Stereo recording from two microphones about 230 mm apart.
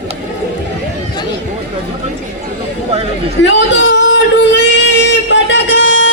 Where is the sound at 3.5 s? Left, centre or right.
Left.